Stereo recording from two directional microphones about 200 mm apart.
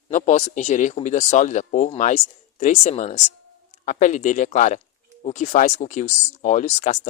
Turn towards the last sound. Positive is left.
turn(degrees=35)  # may be behind; listen again after turning